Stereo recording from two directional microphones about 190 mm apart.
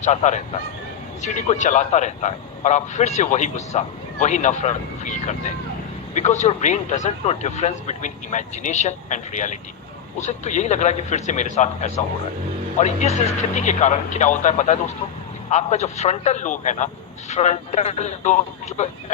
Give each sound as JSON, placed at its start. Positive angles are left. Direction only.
{"t": 0.0, "sound": "a man's voice", "side_deg": 35}